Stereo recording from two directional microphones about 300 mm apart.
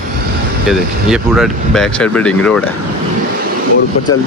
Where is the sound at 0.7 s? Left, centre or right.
Centre.